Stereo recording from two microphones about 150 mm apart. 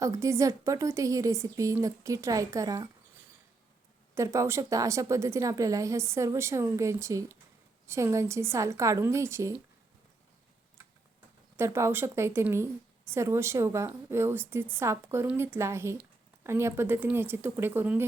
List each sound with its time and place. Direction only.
0.0 s a woman's voice: 20° right (ahead or behind)
4.1 s a woman's voice: 20° right (ahead or behind)
11.5 s a woman's voice: 15° right (ahead or behind)